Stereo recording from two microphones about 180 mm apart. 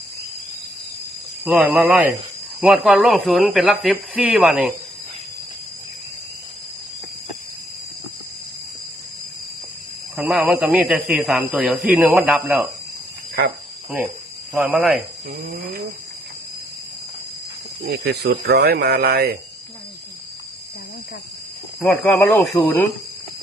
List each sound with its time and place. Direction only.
1.5 s speech: 5° right (ahead or behind)
10.2 s speech: 5° right (ahead or behind)
14.5 s speech: 5° right (ahead or behind)
18.0 s speech: 65° right (ahead or behind)
21.8 s speech: 5° left (ahead or behind)